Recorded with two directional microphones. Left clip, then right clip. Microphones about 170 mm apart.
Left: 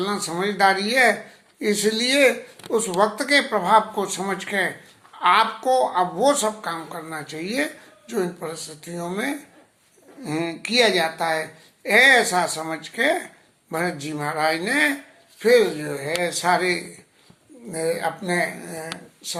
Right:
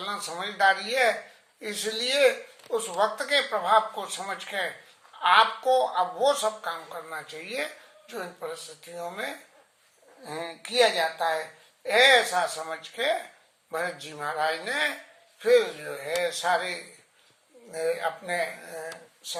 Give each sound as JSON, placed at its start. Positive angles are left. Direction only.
{"t": 0.0, "sound": "speech", "side_deg": 15}